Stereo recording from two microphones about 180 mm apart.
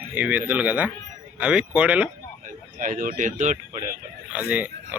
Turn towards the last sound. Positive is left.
turn(degrees=-10)  # may be behind; listen again after turning